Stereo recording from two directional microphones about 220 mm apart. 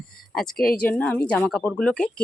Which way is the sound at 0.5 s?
40° left (ahead or behind).